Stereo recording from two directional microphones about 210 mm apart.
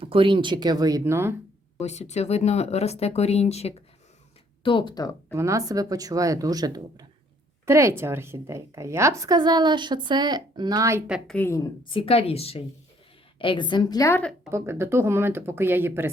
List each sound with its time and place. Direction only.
0.0 s speech: 25° right (ahead or behind)
1.8 s a woman's voice: 30° left (ahead or behind)
5.3 s a woman's voice: 15° right (ahead or behind)
11.3 s a woman's voice: 15° left (ahead or behind)
11.9 s a woman's voice: 25° left (ahead or behind); by 14.5 s 5° left (ahead or behind)
14.5 s a woman's voice: 10° right (ahead or behind)